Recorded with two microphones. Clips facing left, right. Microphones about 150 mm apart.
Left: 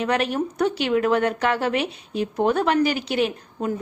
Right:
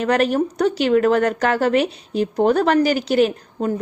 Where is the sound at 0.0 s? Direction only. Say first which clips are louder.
Right 5 dB; 40° right (ahead or behind).